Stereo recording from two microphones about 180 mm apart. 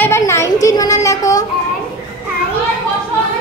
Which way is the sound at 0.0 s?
15° left (ahead or behind).